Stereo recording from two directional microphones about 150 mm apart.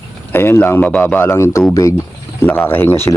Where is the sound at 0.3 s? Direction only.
15° left (ahead or behind).